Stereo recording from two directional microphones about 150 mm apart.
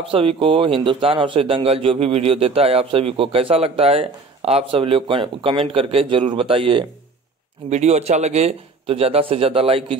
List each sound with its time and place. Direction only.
0.0 s speech: 40° right (ahead or behind)
7.7 s speech: 45° right (ahead or behind)